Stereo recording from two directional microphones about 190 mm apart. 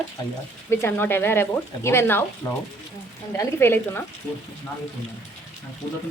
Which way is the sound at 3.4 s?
10° left (ahead or behind).